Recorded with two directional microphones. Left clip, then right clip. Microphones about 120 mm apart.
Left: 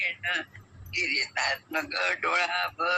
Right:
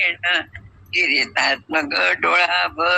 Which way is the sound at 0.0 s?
45° right (ahead or behind).